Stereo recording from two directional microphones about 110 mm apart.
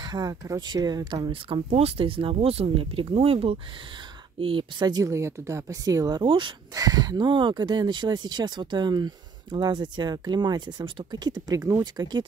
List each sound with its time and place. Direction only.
0.0 s speech: 40° right (ahead or behind)
1.7 s speech: 65° right (ahead or behind); by 6.2 s 35° right (ahead or behind)
6.2 s speech: 45° right (ahead or behind)
6.7 s speech: 35° right (ahead or behind)
11.8 s speech: 40° right (ahead or behind)